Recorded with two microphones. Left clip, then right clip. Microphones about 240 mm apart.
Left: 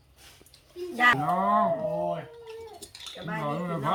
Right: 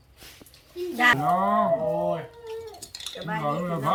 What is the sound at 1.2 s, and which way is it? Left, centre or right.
Speech, centre.